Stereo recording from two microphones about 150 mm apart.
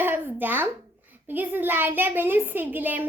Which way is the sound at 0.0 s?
15° right (ahead or behind).